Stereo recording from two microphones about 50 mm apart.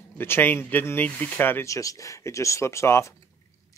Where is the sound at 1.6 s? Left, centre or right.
Left.